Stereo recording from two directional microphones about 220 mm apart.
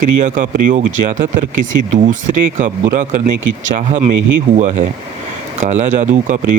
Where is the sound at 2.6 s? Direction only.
35° right (ahead or behind).